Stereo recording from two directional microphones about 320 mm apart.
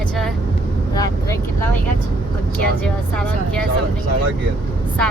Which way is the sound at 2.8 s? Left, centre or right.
Centre.